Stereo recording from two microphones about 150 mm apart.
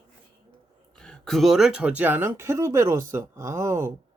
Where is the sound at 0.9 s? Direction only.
5° left (ahead or behind); by 3.9 s 20° right (ahead or behind).